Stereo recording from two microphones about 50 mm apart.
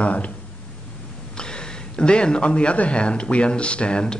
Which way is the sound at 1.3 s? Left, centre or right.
Centre.